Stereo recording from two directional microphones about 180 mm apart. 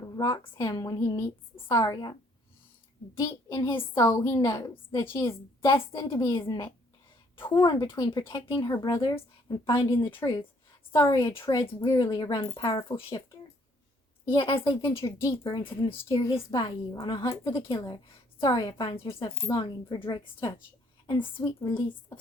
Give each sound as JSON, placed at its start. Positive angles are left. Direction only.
{"t": 0.2, "sound": "a woman's voice", "side_deg": 20}
{"t": 3.2, "sound": "a woman's voice", "side_deg": 20}
{"t": 7.6, "sound": "a woman's voice", "side_deg": 25}
{"t": 14.3, "sound": "a woman's voice", "side_deg": 25}
{"t": 21.2, "sound": "a woman's voice", "side_deg": 10}